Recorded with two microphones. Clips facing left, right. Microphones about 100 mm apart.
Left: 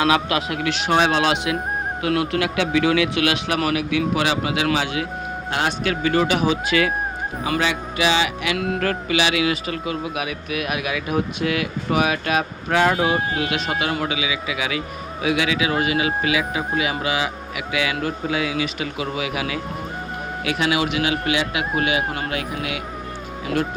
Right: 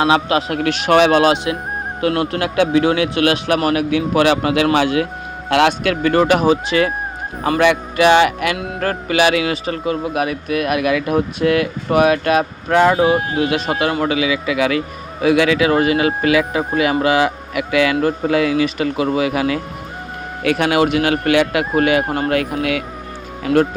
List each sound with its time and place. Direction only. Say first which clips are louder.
0.0 s speech: right 4 dB; 30° right (ahead or behind)
0.5 s speech: right 6 dB; 50° right (ahead or behind)
1.2 s speech: right 6 dB; 40° right (ahead or behind)
2.0 s speech: right 4 dB; 50° right (ahead or behind)
5.5 s speech: right 9 dB; 80° right
6.0 s speech: right 5 dB; 50° right (ahead or behind)
7.6 s speech: right 11 dB; 60° right (ahead or behind)
8.5 s speech: left 2 dB; 25° right (ahead or behind)
8.8 s speech: right 9 dB; 40° right (ahead or behind); by 13.0 s 60° right (ahead or behind)
13.0 s speech: right 6 dB; 40° right (ahead or behind)